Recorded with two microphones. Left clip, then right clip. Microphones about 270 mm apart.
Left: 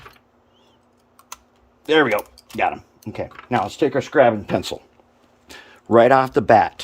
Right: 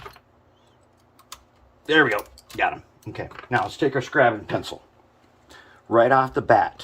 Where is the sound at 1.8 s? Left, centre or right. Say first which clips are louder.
Left 2 dB; left.